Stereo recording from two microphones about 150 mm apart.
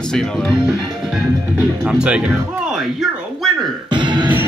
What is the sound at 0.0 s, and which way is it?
Speech, 5° left (ahead or behind).